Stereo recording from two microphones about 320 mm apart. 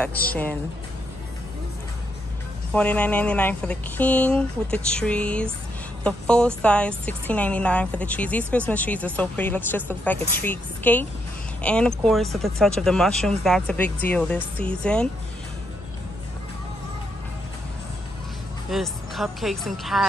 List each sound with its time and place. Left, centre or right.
0.1 s speech: left
2.7 s a woman's voice: centre
18.7 s a woman's voice: centre